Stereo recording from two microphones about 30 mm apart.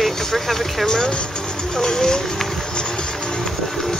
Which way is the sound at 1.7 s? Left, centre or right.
Left.